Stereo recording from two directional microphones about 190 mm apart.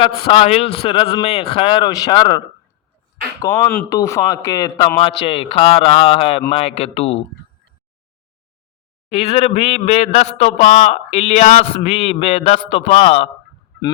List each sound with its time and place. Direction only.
0.0 s a man's voice: 25° left (ahead or behind)
3.4 s a man's voice: 15° left (ahead or behind); by 7.3 s 30° left (ahead or behind)
9.0 s a man's voice: 30° left (ahead or behind)